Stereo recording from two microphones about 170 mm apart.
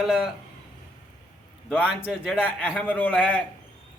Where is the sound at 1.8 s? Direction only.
5° right (ahead or behind).